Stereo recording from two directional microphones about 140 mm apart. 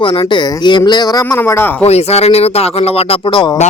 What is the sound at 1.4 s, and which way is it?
Speech, 15° left (ahead or behind).